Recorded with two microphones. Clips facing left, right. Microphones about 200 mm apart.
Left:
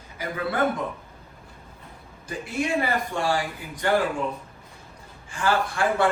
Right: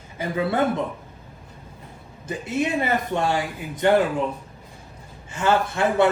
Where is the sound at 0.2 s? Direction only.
25° right (ahead or behind).